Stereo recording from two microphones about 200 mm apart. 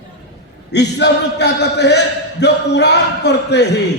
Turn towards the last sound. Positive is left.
turn(degrees=60)  # may be behind; listen again after turning